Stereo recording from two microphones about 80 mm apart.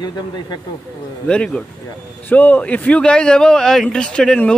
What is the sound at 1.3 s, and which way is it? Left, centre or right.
Speech, centre.